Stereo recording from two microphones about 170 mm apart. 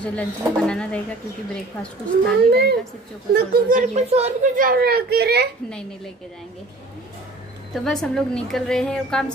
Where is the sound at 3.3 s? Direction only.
60° right (ahead or behind); by 4.5 s 40° right (ahead or behind).